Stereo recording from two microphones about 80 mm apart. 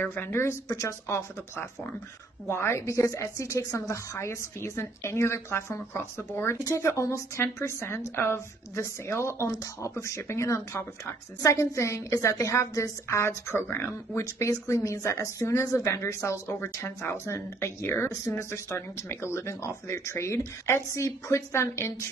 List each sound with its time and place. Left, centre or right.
0.0 s speech: left
0.7 s speech: left